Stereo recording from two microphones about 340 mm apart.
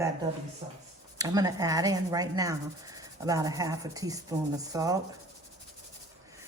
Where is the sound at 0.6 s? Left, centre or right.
Centre.